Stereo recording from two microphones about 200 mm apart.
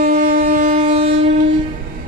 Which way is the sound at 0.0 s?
40° right (ahead or behind).